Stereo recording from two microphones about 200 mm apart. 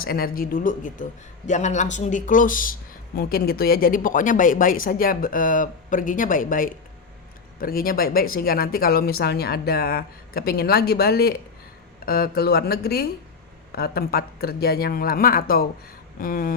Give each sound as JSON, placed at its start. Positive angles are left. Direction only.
{"t": 0.0, "sound": "speech", "side_deg": 50}